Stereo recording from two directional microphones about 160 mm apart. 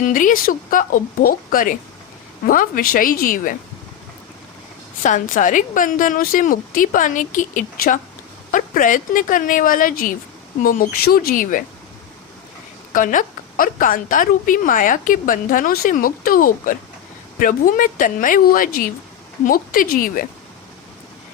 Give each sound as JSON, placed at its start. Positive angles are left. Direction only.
{"t": 0.0, "sound": "a woman's voice", "side_deg": 55}
{"t": 5.0, "sound": "a woman's voice", "side_deg": 50}
{"t": 12.9, "sound": "a woman's voice", "side_deg": 55}